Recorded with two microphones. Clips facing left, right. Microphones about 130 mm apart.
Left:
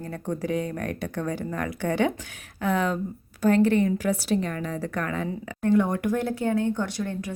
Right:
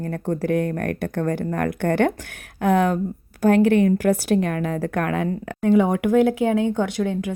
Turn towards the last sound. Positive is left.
turn(degrees=-90)